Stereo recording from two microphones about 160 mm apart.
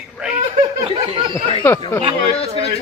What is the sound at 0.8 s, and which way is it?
Snicker, 20° right (ahead or behind).